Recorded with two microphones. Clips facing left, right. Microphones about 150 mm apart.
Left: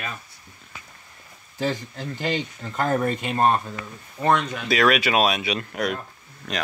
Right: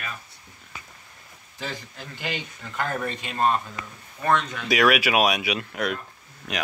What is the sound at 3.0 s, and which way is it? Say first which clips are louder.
Speech: left 4 dB; 50° left (ahead or behind).